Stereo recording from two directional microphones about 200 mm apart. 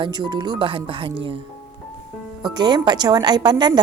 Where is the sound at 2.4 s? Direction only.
20° right (ahead or behind).